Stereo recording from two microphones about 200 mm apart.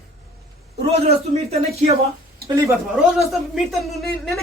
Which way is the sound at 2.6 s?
15° right (ahead or behind).